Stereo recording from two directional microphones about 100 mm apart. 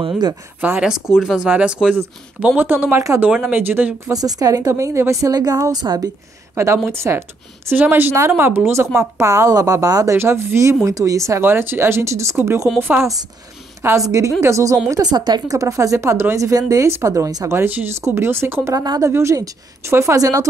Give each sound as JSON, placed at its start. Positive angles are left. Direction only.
{"t": 0.6, "sound": "speech", "side_deg": -10}
{"t": 3.2, "sound": "speech", "side_deg": -15}
{"t": 4.1, "sound": "a woman's voice", "side_deg": -40}
{"t": 6.5, "sound": "a woman's voice", "side_deg": -25}
{"t": 13.8, "sound": "a woman's voice", "side_deg": -35}
{"t": 14.9, "sound": "a woman's voice", "side_deg": -45}
{"t": 17.5, "sound": "speech", "side_deg": -20}